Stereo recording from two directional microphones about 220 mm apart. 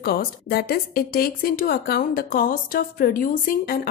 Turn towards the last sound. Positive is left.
turn(degrees=40)  # may be behind; listen again after turning